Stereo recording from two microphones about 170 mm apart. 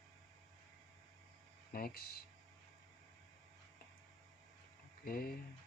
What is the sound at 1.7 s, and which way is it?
Speech, 60° left (ahead or behind).